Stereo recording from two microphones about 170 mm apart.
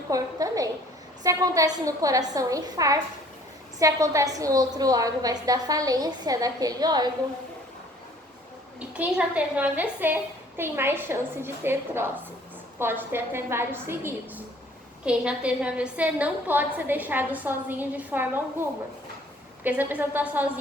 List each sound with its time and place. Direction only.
0.1 s a woman's voice: 20° right (ahead or behind)
9.0 s a woman's voice: 10° right (ahead or behind)
19.6 s a woman's voice: 10° right (ahead or behind)